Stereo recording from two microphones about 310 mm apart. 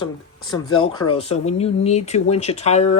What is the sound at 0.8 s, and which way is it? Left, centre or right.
Speech, left.